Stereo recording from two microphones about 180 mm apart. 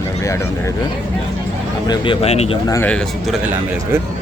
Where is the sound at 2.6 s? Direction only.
15° left (ahead or behind).